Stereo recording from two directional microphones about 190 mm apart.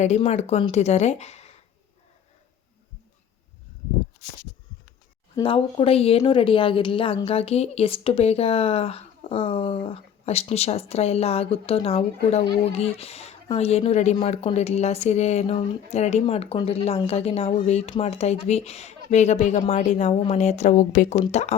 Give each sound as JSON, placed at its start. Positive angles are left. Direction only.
{"t": 0.0, "sound": "speech", "side_deg": 35}
{"t": 5.4, "sound": "speech", "side_deg": 30}